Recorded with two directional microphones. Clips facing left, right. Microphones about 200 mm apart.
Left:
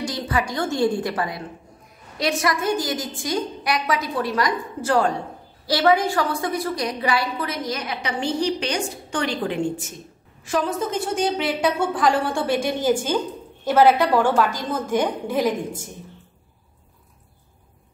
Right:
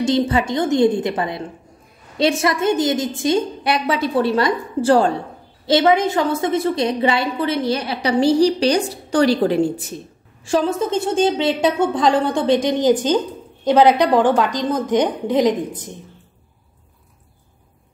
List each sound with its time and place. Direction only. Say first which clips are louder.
0.0 s a woman's voice: right 8 dB; 25° right (ahead or behind)